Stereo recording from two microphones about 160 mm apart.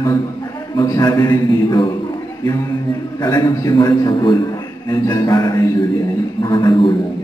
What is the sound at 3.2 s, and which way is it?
Mantra, 20° left (ahead or behind).